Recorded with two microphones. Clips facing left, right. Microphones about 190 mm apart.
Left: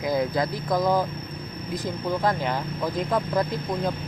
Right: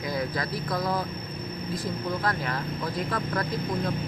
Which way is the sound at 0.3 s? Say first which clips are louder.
Left 5 dB; 25° left (ahead or behind).